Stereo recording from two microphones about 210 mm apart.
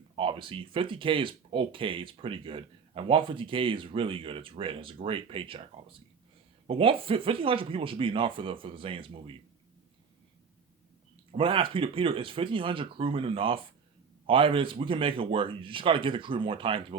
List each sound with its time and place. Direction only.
0.2 s speech: 25° right (ahead or behind)
11.3 s speech: 25° right (ahead or behind)